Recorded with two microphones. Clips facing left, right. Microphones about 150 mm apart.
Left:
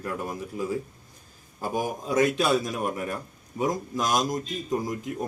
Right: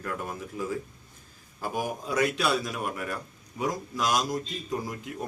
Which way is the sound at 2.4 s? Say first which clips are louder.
Left 3 dB; 45° left (ahead or behind).